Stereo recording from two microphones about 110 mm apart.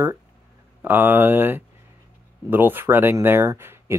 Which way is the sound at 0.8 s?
20° right (ahead or behind).